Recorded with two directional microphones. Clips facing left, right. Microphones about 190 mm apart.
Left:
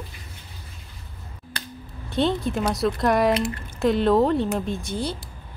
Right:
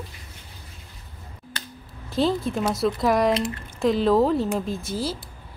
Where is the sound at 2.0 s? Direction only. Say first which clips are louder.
Even; centre (ahead or behind).